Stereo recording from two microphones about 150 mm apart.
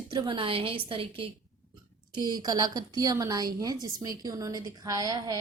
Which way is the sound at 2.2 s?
25° right (ahead or behind).